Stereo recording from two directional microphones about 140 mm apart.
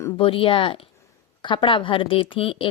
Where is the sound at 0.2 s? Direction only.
40° left (ahead or behind).